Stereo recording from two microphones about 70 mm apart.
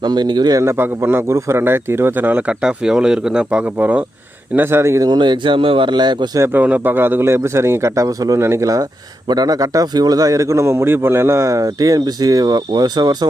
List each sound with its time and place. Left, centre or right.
0.0 s a man's voice: right
0.6 s a man's voice: right
2.5 s speech: centre
4.5 s a man's voice: right
5.0 s a man's voice: right
6.6 s a man's voice: right
8.0 s speech: right
8.4 s a man's voice: right
9.3 s speech: right